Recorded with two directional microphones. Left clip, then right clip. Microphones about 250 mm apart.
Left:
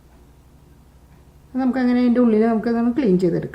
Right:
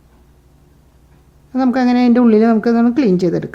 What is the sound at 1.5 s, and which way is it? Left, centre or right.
A woman's voice, right.